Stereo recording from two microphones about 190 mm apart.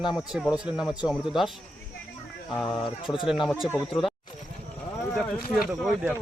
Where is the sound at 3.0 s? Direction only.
Centre (ahead or behind).